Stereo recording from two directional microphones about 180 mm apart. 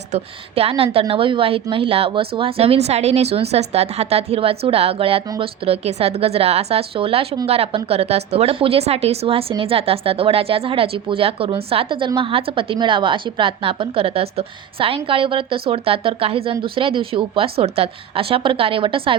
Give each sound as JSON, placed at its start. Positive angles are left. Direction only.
{"t": 0.1, "sound": "a woman's voice", "side_deg": -35}